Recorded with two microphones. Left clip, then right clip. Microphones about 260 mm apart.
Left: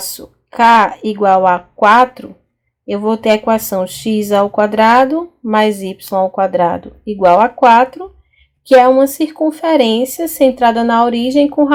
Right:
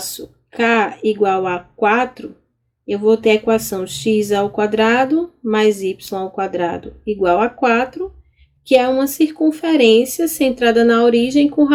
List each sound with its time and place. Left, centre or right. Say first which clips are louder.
0.5 s speech: left 7 dB; centre